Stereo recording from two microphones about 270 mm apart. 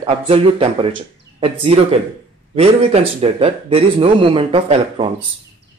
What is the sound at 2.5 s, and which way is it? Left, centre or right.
Speech, right.